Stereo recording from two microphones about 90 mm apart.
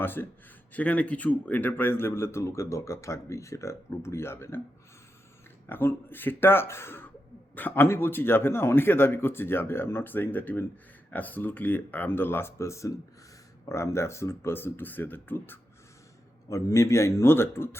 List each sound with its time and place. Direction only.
0.0 s a man's voice: 25° left (ahead or behind)
5.6 s a man's voice: 25° left (ahead or behind)
16.5 s speech: 35° left (ahead or behind)